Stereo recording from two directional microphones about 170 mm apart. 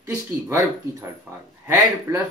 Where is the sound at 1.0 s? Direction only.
15° right (ahead or behind).